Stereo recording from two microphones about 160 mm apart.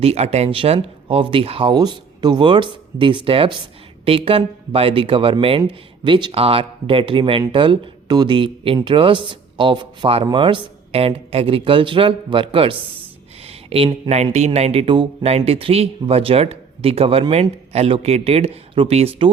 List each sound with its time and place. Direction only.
0.0 s speech: 40° right (ahead or behind)